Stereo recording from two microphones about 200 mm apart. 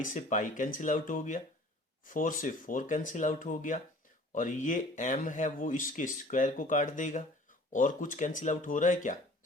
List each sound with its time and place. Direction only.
0.0 s speech: 40° left (ahead or behind)